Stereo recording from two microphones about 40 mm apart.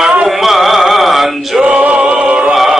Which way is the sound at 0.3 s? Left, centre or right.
Centre.